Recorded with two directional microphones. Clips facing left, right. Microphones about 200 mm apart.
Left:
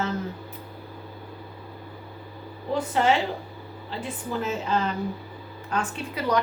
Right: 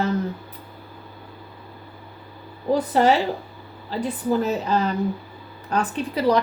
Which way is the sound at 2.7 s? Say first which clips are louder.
Right 4 dB; 40° right (ahead or behind).